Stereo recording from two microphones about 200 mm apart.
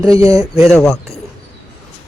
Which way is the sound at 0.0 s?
15° right (ahead or behind).